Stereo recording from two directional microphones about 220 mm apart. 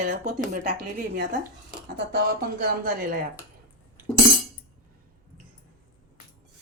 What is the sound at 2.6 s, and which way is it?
Speech, 40° right (ahead or behind).